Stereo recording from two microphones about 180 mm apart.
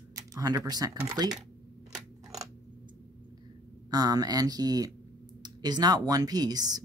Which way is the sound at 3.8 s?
20° right (ahead or behind).